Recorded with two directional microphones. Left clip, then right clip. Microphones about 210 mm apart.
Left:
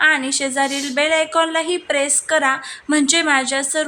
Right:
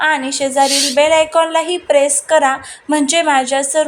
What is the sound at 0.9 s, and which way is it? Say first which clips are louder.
Speech: right 4 dB; 5° right (ahead or behind).